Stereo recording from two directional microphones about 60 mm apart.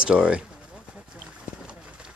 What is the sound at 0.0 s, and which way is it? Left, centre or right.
Speech, centre.